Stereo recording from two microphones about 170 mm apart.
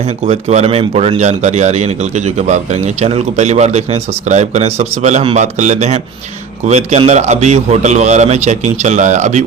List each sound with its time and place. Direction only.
0.0 s a man's voice: 40° right (ahead or behind)